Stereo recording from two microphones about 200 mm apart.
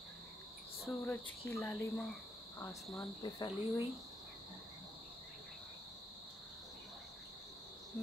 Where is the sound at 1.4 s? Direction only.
15° left (ahead or behind).